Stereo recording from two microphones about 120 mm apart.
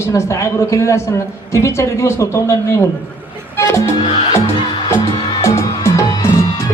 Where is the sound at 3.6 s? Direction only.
20° left (ahead or behind).